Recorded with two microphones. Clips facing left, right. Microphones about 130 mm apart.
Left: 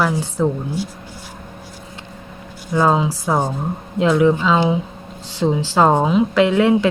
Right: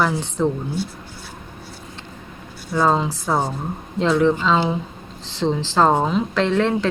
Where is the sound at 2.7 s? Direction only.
5° left (ahead or behind).